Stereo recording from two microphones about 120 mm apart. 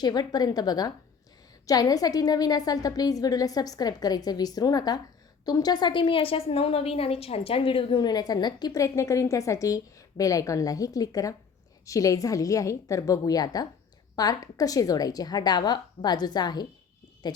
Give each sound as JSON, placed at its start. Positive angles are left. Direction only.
{"t": 0.0, "sound": "a woman's voice", "side_deg": 35}